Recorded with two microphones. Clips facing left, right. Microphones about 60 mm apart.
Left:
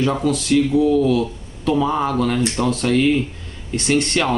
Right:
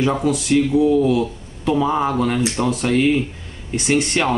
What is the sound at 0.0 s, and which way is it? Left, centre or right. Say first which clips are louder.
Speech: even; centre.